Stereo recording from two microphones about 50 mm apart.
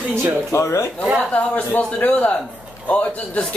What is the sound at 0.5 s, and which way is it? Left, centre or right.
Speech, left.